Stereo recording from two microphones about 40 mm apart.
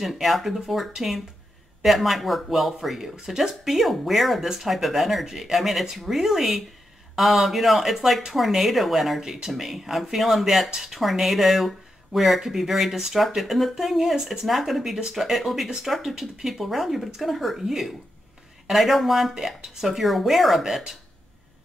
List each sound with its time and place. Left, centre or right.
0.0 s speech: centre
9.2 s speech: centre
14.4 s speech: centre